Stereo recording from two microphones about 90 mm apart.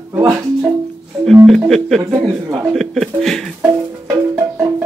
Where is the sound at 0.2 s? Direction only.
35° right (ahead or behind).